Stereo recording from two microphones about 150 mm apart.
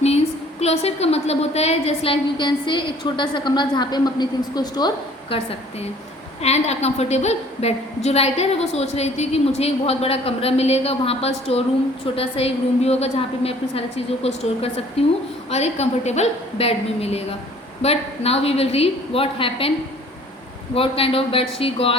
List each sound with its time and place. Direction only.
0.6 s a woman's voice: 45° left (ahead or behind)
20.7 s a woman's voice: 40° left (ahead or behind)